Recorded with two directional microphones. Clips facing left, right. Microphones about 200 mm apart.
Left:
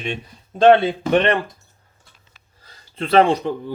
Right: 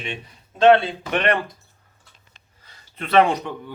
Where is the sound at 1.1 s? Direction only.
30° left (ahead or behind).